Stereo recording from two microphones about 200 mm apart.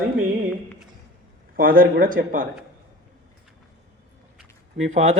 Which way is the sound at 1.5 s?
45° right (ahead or behind).